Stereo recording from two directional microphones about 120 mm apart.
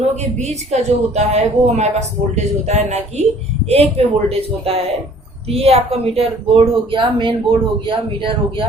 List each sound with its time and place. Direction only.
0.0 s a woman's voice: 70° right (ahead or behind); by 8.6 s 45° right (ahead or behind)